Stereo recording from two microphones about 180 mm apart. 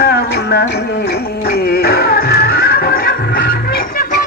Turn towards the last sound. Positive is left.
turn(degrees=55)  # may be behind; listen again after turning